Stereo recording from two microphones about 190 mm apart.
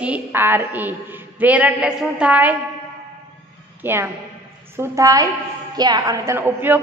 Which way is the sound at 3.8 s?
10° right (ahead or behind).